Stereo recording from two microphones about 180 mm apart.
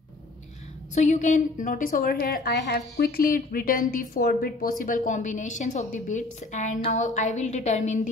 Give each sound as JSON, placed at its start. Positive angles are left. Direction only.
{"t": 0.9, "sound": "a woman's voice", "side_deg": 40}